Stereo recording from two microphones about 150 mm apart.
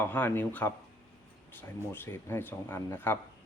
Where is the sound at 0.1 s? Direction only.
10° left (ahead or behind).